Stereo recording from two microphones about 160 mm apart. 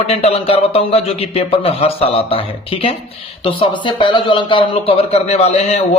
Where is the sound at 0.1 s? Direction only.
40° left (ahead or behind).